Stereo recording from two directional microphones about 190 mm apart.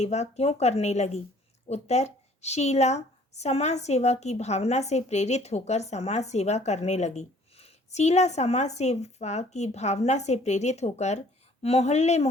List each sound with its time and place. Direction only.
0.0 s a woman's voice: 35° left (ahead or behind)